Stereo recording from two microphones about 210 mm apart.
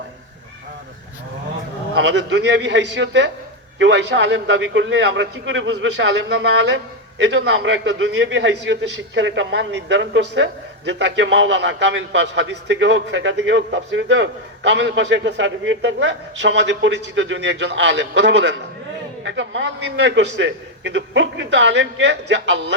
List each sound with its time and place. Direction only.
2.0 s a man's voice: 60° right (ahead or behind)